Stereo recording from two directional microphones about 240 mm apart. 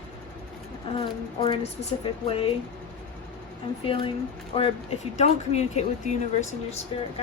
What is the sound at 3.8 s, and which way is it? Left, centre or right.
Speech, left.